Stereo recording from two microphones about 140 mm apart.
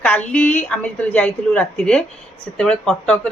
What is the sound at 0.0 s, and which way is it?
Speech, 10° left (ahead or behind).